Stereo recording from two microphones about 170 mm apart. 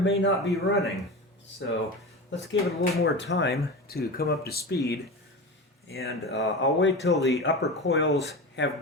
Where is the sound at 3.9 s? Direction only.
65° left (ahead or behind).